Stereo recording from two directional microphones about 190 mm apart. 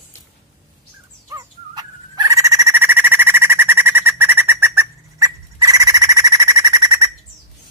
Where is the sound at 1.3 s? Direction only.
20° right (ahead or behind).